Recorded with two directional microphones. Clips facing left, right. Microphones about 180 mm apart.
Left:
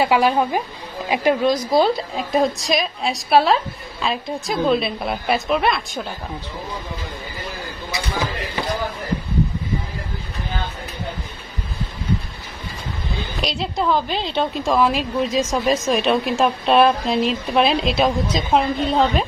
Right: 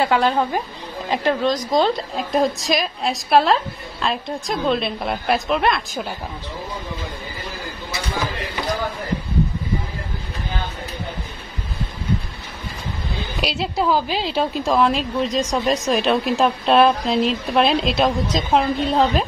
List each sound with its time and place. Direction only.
0.0 s a woman's voice: 10° left (ahead or behind)
13.4 s a woman's voice: 5° right (ahead or behind)